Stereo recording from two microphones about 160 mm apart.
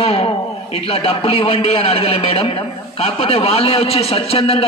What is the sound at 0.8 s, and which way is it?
A man's voice, 40° left (ahead or behind).